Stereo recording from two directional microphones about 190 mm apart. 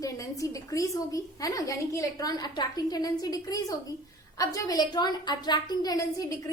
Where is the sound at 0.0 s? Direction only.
15° left (ahead or behind).